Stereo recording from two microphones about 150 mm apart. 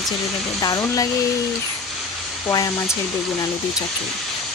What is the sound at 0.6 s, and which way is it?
Speech, 25° left (ahead or behind).